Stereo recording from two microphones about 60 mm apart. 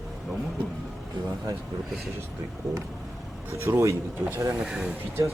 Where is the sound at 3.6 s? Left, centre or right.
Right.